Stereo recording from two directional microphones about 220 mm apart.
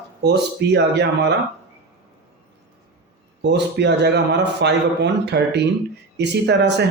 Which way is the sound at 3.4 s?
50° right (ahead or behind).